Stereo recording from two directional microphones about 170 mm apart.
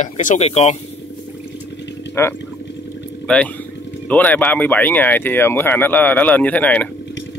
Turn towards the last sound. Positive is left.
turn(degrees=10)  # may be behind; listen again after turning